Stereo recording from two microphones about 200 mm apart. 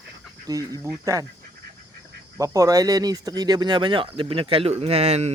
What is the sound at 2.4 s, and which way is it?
Speech, 15° right (ahead or behind).